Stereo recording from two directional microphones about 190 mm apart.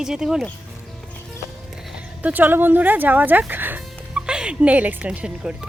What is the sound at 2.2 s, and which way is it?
Speech, 10° right (ahead or behind).